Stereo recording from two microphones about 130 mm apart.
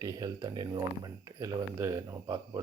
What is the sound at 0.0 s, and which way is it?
Speech, 30° right (ahead or behind).